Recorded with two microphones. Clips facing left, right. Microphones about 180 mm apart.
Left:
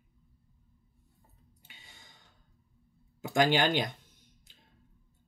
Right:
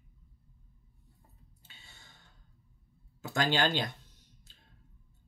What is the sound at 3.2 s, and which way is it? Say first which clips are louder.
Speech: left 3 dB; 20° left (ahead or behind).